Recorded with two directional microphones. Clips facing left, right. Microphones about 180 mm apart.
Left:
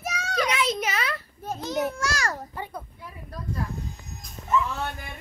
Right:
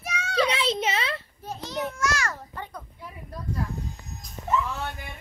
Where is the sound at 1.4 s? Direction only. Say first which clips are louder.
Left 5 dB; 45° left (ahead or behind).